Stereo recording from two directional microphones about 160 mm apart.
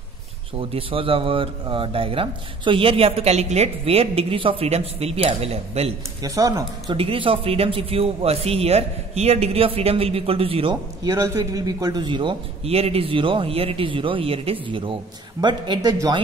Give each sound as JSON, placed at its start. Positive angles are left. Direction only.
{"t": 0.6, "sound": "speech", "side_deg": -35}
{"t": 6.2, "sound": "speech", "side_deg": -20}
{"t": 7.0, "sound": "speech", "side_deg": -35}
{"t": 11.1, "sound": "speech", "side_deg": -20}